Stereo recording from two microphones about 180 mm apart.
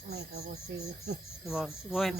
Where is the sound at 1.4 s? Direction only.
Centre (ahead or behind).